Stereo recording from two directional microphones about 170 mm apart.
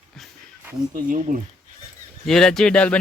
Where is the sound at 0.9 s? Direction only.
55° right (ahead or behind).